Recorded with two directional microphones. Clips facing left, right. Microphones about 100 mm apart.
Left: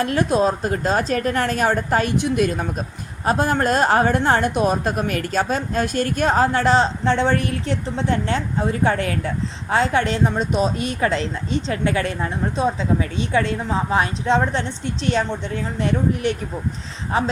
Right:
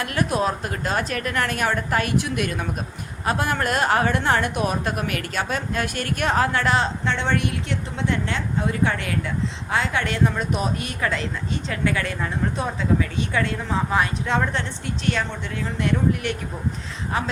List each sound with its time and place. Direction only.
0.0 s a woman's voice: 30° left (ahead or behind)